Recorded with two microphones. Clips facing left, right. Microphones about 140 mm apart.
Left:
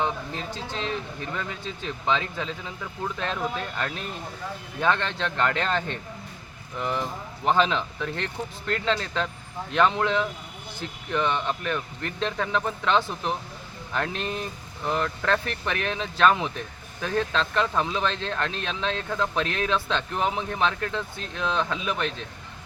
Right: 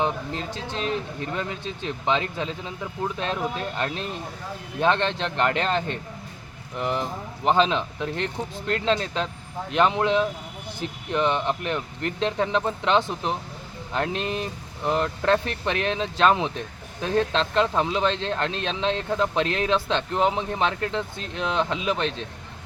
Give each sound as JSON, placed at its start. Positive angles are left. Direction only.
{"t": 0.0, "sound": "speech", "side_deg": -20}
{"t": 2.0, "sound": "speech", "side_deg": -20}